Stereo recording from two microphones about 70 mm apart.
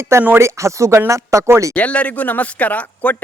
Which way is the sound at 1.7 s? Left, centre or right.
Centre.